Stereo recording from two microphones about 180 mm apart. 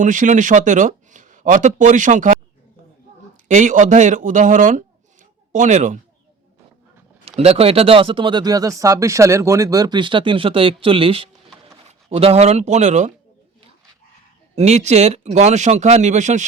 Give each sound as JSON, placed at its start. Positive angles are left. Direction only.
{"t": 0.0, "sound": "speech", "side_deg": -45}
{"t": 3.5, "sound": "speech", "side_deg": -45}
{"t": 7.3, "sound": "speech", "side_deg": -35}
{"t": 14.5, "sound": "a man's voice", "side_deg": -40}